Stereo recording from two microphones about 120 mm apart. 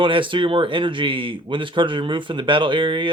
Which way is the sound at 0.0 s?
45° right (ahead or behind).